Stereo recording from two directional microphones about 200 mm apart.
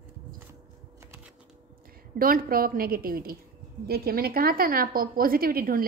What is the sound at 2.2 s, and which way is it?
A woman's voice, 45° right (ahead or behind).